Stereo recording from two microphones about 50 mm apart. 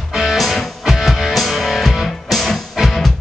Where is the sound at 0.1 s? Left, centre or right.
Centre.